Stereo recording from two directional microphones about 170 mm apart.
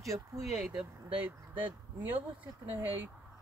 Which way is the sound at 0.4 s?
Centre (ahead or behind).